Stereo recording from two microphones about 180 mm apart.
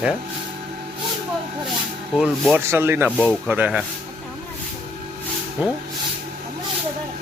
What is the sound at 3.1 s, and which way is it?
Speech, 5° left (ahead or behind).